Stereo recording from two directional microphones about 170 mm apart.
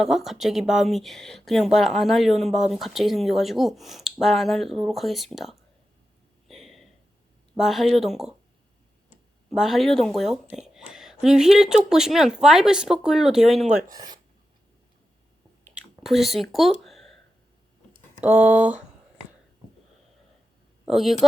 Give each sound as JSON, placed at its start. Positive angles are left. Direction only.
{"t": 0.0, "sound": "speech", "side_deg": 0}
{"t": 6.5, "sound": "a sound", "side_deg": 0}
{"t": 7.5, "sound": "speech", "side_deg": 0}
{"t": 9.5, "sound": "speech", "side_deg": 0}
{"t": 13.9, "sound": "speech", "side_deg": -25}
{"t": 16.0, "sound": "speech", "side_deg": 0}
{"t": 18.2, "sound": "speech", "side_deg": -10}
{"t": 20.8, "sound": "speech", "side_deg": 0}